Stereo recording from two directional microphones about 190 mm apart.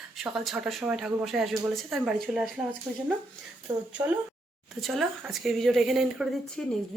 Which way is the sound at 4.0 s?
15° right (ahead or behind).